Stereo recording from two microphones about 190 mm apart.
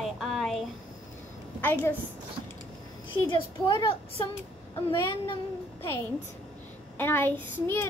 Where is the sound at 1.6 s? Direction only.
10° left (ahead or behind).